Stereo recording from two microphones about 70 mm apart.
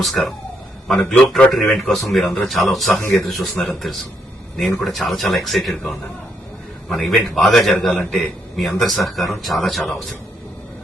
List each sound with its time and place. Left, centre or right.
0.0 s speech: centre